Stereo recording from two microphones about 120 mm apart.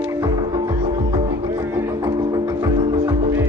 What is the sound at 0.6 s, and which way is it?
Music, 40° right (ahead or behind).